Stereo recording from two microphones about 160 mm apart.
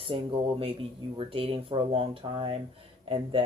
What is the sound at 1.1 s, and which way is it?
Speech, 35° right (ahead or behind).